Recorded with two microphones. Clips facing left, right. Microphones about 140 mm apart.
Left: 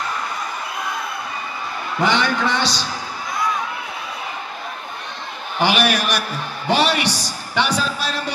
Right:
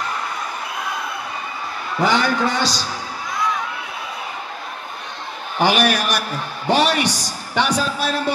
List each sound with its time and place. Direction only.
2.0 s a man's voice: 40° right (ahead or behind)
5.6 s a man's voice: 45° right (ahead or behind)